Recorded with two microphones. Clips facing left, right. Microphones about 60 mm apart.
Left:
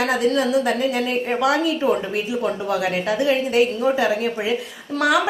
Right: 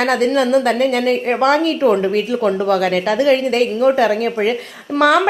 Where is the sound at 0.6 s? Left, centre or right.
Right.